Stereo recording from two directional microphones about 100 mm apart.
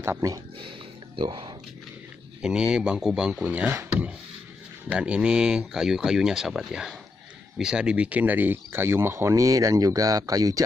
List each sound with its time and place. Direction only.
0.0 s speech: 25° right (ahead or behind)
0.6 s a sound: 60° right (ahead or behind)
2.4 s speech: 10° right (ahead or behind); by 10.6 s 35° right (ahead or behind)